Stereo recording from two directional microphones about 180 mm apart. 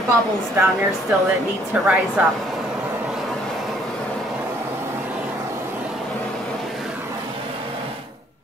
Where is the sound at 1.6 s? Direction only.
Centre (ahead or behind).